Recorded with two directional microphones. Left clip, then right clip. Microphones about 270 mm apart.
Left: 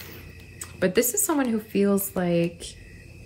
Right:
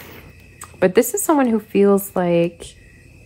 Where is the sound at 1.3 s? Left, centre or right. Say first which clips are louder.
Right 8 dB; right.